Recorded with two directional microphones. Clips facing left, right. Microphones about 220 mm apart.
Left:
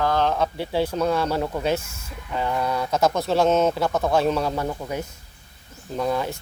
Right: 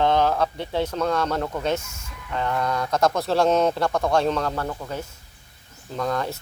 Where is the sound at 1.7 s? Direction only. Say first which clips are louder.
Left 1 dB; 30° left (ahead or behind).